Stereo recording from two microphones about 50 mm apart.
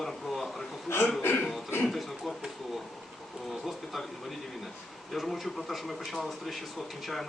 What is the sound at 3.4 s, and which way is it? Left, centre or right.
Speech, centre.